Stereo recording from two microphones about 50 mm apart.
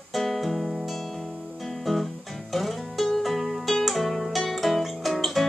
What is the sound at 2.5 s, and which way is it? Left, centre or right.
Music, centre.